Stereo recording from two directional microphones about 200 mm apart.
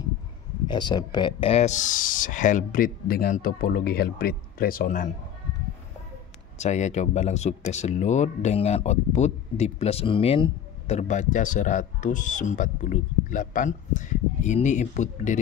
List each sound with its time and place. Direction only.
0.7 s speech: 20° left (ahead or behind); by 5.1 s 40° left (ahead or behind)
6.6 s speech: 35° left (ahead or behind)